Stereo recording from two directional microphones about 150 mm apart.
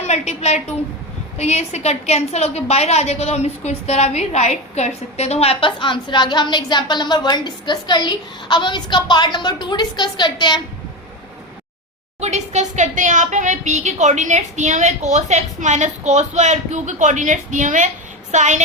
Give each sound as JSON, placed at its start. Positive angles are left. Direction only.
{"t": 0.0, "sound": "a woman's voice", "side_deg": 50}
{"t": 12.2, "sound": "a woman's voice", "side_deg": -50}